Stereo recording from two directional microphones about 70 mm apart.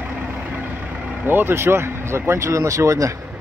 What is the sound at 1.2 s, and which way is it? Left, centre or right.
Speech, right.